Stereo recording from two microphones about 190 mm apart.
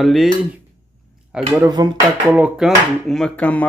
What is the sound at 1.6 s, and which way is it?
Speech, 20° right (ahead or behind).